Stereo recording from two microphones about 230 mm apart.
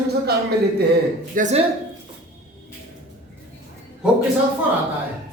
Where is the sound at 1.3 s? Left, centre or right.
Right.